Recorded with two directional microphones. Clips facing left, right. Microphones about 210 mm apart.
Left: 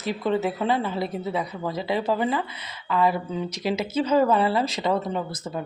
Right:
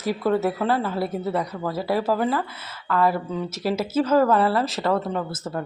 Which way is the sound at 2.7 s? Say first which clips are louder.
Right 1 dB; 15° left (ahead or behind).